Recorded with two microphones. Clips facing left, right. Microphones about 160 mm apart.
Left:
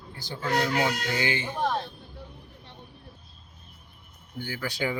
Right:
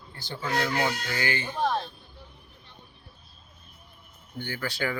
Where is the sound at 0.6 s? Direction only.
20° left (ahead or behind).